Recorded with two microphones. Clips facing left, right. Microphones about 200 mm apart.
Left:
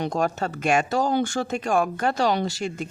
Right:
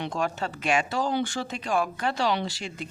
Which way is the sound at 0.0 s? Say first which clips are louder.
Left 4 dB; 40° left (ahead or behind).